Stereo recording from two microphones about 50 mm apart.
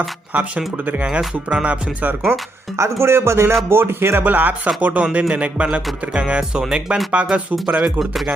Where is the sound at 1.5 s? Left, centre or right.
Right.